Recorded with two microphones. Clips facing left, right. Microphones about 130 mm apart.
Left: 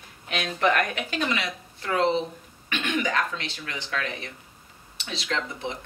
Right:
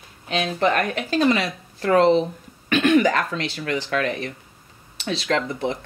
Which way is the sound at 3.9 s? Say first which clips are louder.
Right 8 dB; 50° right (ahead or behind).